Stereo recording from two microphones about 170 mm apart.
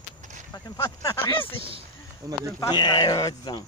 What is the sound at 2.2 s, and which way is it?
Speech, 20° right (ahead or behind).